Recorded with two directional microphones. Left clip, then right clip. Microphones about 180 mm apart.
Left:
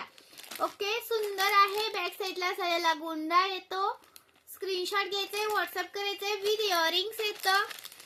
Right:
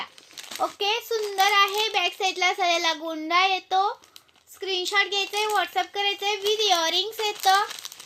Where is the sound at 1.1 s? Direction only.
25° left (ahead or behind).